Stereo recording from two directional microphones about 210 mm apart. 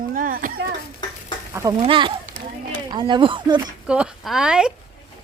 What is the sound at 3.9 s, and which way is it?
Speech, 5° right (ahead or behind).